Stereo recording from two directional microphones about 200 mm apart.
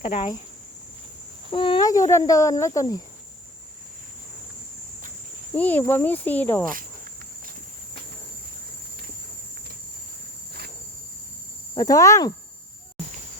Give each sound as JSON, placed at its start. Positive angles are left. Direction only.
{"t": 0.0, "sound": "speech", "side_deg": 25}
{"t": 1.5, "sound": "speech", "side_deg": 25}
{"t": 5.5, "sound": "speech", "side_deg": 10}
{"t": 11.7, "sound": "speech", "side_deg": 15}